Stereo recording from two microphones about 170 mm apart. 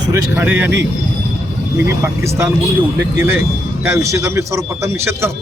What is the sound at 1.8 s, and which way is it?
Speech, 15° right (ahead or behind).